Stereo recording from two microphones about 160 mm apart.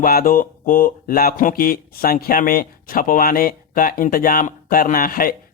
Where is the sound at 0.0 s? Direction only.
65° left (ahead or behind).